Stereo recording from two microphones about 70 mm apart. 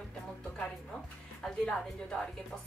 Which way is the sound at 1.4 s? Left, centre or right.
Centre.